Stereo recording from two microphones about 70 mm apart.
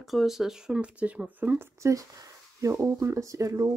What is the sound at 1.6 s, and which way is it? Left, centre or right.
Speech, right.